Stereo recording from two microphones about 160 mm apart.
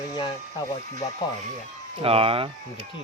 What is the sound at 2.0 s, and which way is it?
Speech, 35° right (ahead or behind).